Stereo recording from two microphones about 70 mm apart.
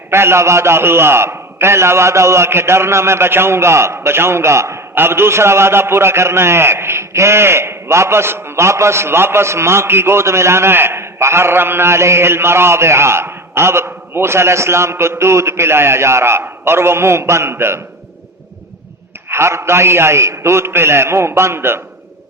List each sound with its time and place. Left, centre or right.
0.1 s a man's voice: right
19.3 s a man's voice: right